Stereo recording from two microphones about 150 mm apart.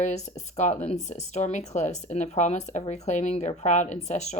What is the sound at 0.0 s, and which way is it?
A woman's voice, 50° left (ahead or behind).